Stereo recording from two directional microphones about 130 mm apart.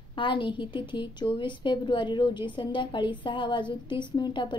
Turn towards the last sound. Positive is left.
turn(degrees=35)  # may be behind; listen again after turning